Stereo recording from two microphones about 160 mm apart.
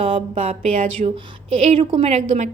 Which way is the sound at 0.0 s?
35° right (ahead or behind).